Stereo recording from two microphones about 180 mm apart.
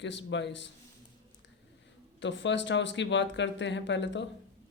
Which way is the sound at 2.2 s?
90° left.